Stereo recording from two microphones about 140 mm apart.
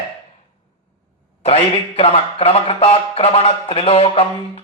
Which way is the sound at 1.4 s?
45° left (ahead or behind).